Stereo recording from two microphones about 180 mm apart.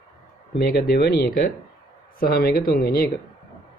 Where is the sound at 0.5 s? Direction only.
60° left (ahead or behind).